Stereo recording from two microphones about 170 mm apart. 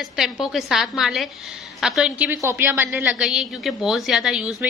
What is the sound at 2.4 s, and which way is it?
A woman's voice, 15° right (ahead or behind).